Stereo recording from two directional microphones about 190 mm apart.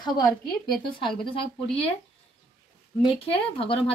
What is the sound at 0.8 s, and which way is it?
A woman's voice, 25° left (ahead or behind).